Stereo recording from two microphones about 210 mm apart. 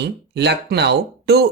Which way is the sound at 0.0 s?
55° right (ahead or behind).